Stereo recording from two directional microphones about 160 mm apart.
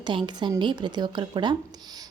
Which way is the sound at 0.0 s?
30° right (ahead or behind).